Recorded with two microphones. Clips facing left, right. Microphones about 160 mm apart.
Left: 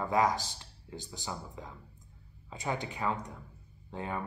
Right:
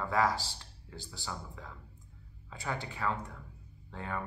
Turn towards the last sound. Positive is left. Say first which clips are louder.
# left 2 dB
turn(degrees=20)  # may be behind; listen again after turning